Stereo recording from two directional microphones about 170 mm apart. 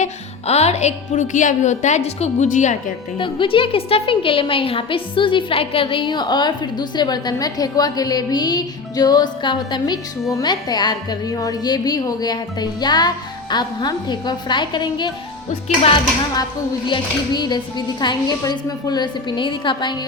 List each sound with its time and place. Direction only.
0.0 s speech: 40° left (ahead or behind)
3.2 s a woman's voice: 30° left (ahead or behind)